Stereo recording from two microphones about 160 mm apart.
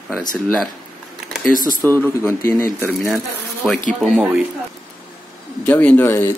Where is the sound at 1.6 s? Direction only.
60° left (ahead or behind).